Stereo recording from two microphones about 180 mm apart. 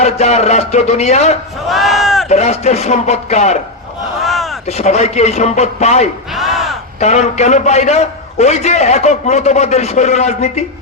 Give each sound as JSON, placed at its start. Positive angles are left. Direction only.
{"t": 0.0, "sound": "a man's voice", "side_deg": 40}
{"t": 1.6, "sound": "a sound", "side_deg": 0}
{"t": 2.3, "sound": "a man's voice", "side_deg": 40}
{"t": 4.2, "sound": "artillery fire", "side_deg": 0}
{"t": 4.8, "sound": "a man's voice", "side_deg": 35}
{"t": 6.3, "sound": "crowd", "side_deg": 0}
{"t": 7.0, "sound": "a man's voice", "side_deg": 40}